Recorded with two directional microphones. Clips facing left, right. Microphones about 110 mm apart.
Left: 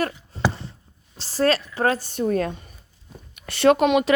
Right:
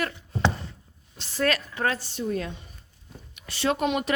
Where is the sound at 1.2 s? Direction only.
35° left (ahead or behind).